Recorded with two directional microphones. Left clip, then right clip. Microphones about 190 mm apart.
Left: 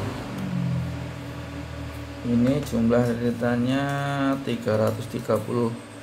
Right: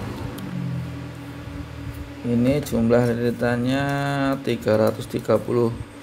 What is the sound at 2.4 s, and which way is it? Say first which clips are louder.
Speech: right 3 dB; 40° right (ahead or behind).